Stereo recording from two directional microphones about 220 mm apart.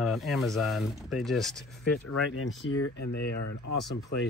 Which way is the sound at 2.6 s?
55° left (ahead or behind).